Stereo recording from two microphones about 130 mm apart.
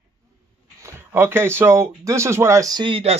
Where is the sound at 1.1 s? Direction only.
20° right (ahead or behind).